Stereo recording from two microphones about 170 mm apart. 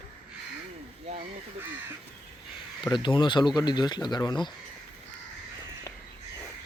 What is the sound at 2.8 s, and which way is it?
Speech, 30° left (ahead or behind).